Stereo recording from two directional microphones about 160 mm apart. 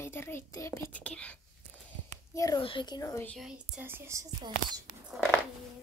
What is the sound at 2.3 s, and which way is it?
Speech, 20° left (ahead or behind).